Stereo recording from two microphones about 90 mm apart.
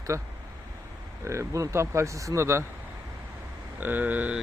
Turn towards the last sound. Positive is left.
turn(degrees=-15)  # may be behind; listen again after turning